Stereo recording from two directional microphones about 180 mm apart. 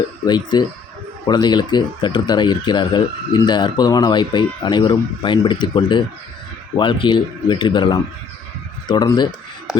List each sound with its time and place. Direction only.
0.3 s speech: 25° left (ahead or behind)